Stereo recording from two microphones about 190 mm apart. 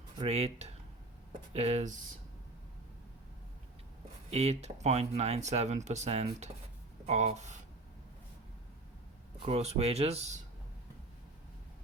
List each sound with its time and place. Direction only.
0.2 s speech: 35° right (ahead or behind)
4.3 s speech: 35° right (ahead or behind)
9.4 s speech: 30° right (ahead or behind)